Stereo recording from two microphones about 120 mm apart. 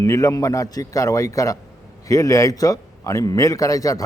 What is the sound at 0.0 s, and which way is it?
A man's voice, 30° left (ahead or behind).